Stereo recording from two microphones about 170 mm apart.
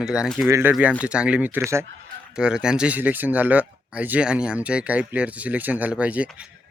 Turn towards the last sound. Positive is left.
turn(degrees=-10)  # may be behind; listen again after turning